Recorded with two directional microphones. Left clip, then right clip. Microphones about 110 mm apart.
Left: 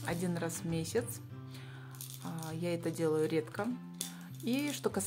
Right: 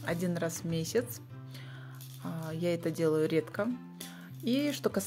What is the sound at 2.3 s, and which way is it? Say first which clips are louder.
Speech: right 5 dB; 30° right (ahead or behind).